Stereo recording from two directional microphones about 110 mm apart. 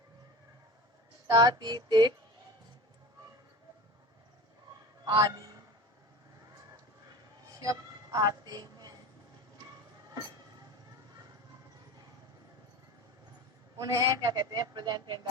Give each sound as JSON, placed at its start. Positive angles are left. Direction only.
{"t": 1.3, "sound": "a man's voice", "side_deg": -35}
{"t": 5.0, "sound": "a man's voice", "side_deg": -35}
{"t": 7.6, "sound": "a sound", "side_deg": -30}
{"t": 13.7, "sound": "a man's voice", "side_deg": -30}